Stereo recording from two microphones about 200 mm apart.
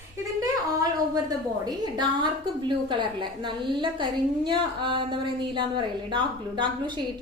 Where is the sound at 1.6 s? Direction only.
20° right (ahead or behind).